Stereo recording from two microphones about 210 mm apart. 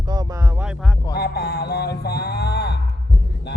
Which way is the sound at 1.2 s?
50° left (ahead or behind).